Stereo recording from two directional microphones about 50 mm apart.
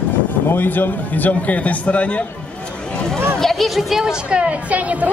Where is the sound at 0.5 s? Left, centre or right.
Left.